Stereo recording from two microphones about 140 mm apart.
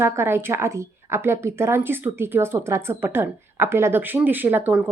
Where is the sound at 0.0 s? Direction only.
15° right (ahead or behind).